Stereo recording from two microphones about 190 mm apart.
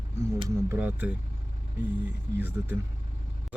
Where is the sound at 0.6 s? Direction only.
10° right (ahead or behind).